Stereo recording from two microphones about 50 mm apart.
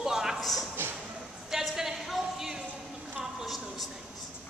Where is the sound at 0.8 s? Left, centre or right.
Right.